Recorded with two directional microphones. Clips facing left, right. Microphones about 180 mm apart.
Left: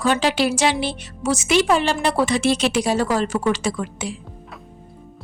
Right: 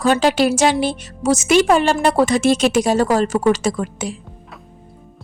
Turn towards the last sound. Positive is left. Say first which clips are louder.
# right 4 dB
turn(degrees=-45)  # may be behind; listen again after turning